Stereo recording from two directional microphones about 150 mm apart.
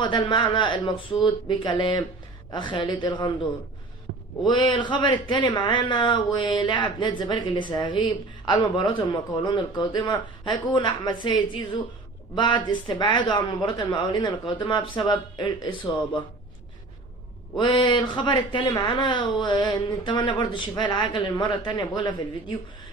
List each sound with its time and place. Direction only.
0.0 s a man's voice: 30° left (ahead or behind)
4.4 s a man's voice: 30° left (ahead or behind)
17.6 s a man's voice: 30° left (ahead or behind)